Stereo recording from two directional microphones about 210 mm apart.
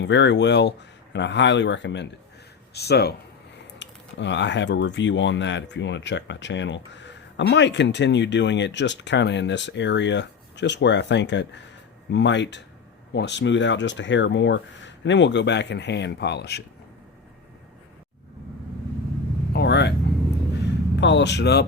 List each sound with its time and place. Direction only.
0.0 s speech: 55° left (ahead or behind)
19.5 s vehicle: 55° left (ahead or behind)
21.0 s speech: 55° left (ahead or behind)